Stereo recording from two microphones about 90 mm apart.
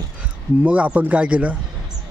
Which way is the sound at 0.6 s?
15° right (ahead or behind).